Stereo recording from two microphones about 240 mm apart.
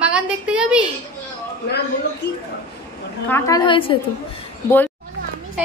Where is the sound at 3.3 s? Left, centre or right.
Centre.